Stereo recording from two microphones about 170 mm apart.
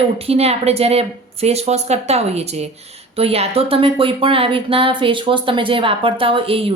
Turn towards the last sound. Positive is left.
turn(degrees=-35)  # may be behind; listen again after turning